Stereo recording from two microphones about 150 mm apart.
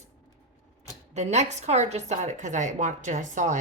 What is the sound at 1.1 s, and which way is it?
A woman's voice, 50° right (ahead or behind).